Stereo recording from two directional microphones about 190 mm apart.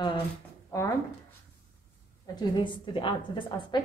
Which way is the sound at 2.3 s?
25° left (ahead or behind).